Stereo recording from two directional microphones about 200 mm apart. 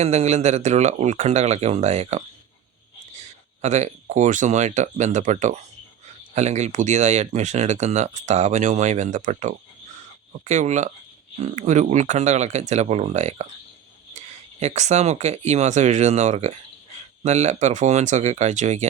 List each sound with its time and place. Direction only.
0.0 s speech: 35° right (ahead or behind)
3.6 s speech: 35° right (ahead or behind)